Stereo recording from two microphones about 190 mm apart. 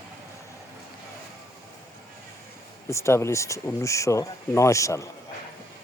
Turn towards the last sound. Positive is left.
turn(degrees=15)  # may be behind; listen again after turning